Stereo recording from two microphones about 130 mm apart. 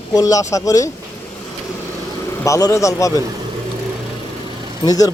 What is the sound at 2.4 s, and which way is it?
Speech, 25° left (ahead or behind).